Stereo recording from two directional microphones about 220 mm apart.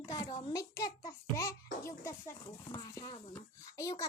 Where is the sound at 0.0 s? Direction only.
15° left (ahead or behind).